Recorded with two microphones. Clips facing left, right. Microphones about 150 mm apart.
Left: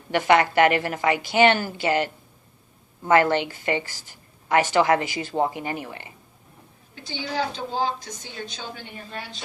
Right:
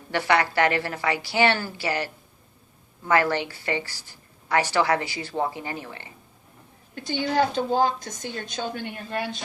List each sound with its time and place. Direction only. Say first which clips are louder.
0.1 s a woman's voice: left 4 dB; 20° left (ahead or behind)
3.1 s a woman's voice: left 3 dB; 20° left (ahead or behind)
6.9 s a woman's voice: right 5 dB; 50° right (ahead or behind)